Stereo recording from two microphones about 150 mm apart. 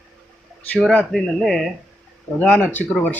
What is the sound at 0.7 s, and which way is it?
Speech, 5° left (ahead or behind).